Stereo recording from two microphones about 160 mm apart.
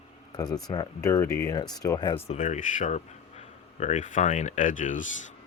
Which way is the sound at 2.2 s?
45° left (ahead or behind).